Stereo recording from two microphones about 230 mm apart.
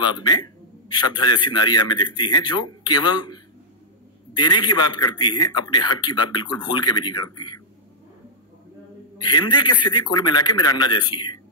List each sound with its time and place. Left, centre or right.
0.0 s a man's voice: centre
9.2 s speech: centre